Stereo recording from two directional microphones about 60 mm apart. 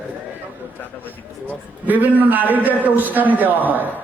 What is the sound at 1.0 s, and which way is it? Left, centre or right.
A man's voice, right.